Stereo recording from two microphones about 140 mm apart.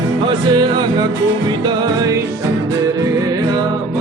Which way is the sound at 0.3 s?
30° right (ahead or behind).